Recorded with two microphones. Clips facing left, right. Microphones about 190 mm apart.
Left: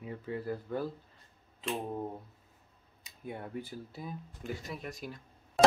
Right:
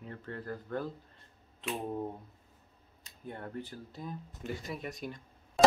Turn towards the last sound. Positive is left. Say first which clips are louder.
# even
turn(degrees=0)  # may be behind; listen again after turning